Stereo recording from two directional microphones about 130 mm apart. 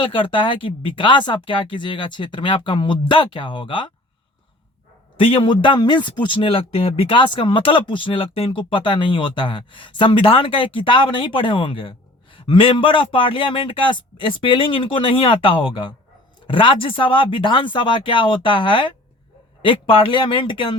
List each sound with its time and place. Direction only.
0.0 s a man's voice: 40° left (ahead or behind)
5.1 s a man's voice: 45° left (ahead or behind)